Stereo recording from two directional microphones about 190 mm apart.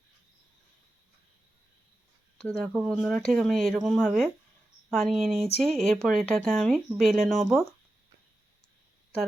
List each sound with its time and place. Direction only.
2.5 s speech: centre (ahead or behind)